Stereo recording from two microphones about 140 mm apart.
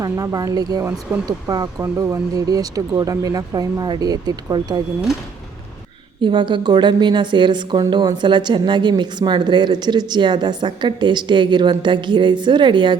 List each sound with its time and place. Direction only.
0.0 s speech: 25° right (ahead or behind)
1.1 s speech: 15° right (ahead or behind)
6.2 s speech: 35° right (ahead or behind)